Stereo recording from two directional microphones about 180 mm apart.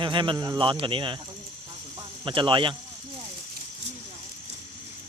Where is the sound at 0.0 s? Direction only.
25° right (ahead or behind).